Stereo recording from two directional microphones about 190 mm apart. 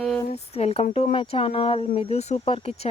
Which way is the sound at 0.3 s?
35° left (ahead or behind).